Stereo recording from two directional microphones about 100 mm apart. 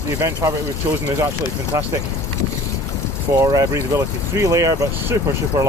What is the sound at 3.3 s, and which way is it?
Speech, 35° right (ahead or behind).